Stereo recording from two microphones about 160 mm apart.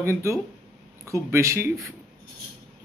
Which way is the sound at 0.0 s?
15° right (ahead or behind).